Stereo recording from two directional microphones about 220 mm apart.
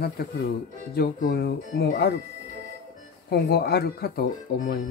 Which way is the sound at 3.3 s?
45° left (ahead or behind).